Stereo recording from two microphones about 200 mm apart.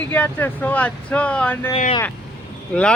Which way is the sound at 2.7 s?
5° left (ahead or behind).